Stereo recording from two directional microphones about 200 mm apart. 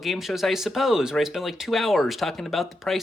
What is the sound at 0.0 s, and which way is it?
Speech, centre (ahead or behind).